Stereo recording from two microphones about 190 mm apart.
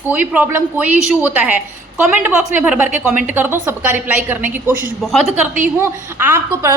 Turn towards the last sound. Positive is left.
turn(degrees=-10)  # may be behind; listen again after turning